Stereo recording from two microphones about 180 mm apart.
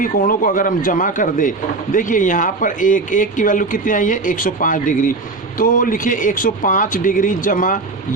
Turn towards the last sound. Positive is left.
turn(degrees=45)  # may be behind; listen again after turning